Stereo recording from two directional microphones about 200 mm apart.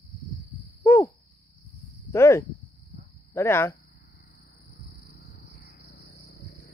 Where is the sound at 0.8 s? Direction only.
10° left (ahead or behind).